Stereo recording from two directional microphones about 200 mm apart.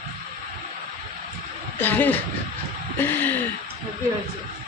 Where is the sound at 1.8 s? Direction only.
10° left (ahead or behind).